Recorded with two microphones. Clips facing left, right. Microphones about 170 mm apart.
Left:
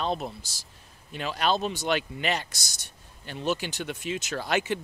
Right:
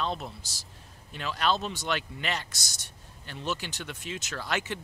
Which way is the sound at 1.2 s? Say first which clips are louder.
Left 2 dB; 15° left (ahead or behind).